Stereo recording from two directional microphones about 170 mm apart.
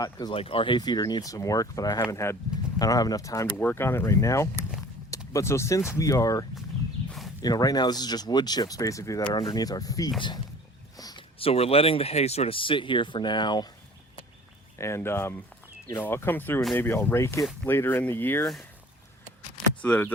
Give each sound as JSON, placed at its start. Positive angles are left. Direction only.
{"t": 0.0, "sound": "speech", "side_deg": 25}
{"t": 7.4, "sound": "speech", "side_deg": 25}
{"t": 10.9, "sound": "a sound", "side_deg": 20}
{"t": 11.3, "sound": "speech", "side_deg": 35}
{"t": 14.8, "sound": "speech", "side_deg": 15}
{"t": 19.8, "sound": "speech", "side_deg": 10}